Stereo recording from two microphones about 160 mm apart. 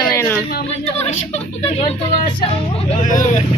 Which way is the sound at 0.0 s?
15° left (ahead or behind).